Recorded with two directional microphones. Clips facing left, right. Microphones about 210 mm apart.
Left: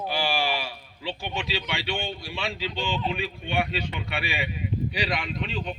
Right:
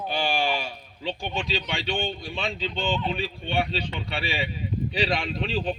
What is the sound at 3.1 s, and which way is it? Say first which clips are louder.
Speech: right 1 dB; 30° right (ahead or behind).